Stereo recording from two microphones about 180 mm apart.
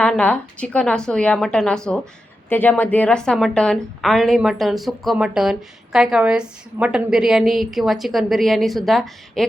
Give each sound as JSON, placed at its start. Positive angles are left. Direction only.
{"t": 0.0, "sound": "a woman's voice", "side_deg": 5}